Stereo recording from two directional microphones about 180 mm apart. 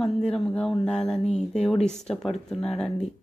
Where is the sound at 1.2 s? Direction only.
35° left (ahead or behind).